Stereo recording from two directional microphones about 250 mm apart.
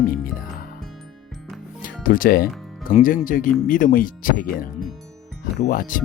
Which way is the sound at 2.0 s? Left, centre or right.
Left.